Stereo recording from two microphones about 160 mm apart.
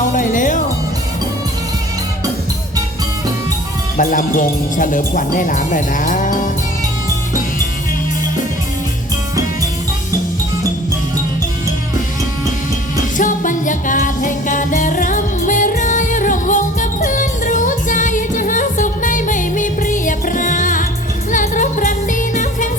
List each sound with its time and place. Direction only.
0.1 s music: 55° left (ahead or behind)
3.9 s speech: 55° left (ahead or behind)
13.1 s music: 55° left (ahead or behind)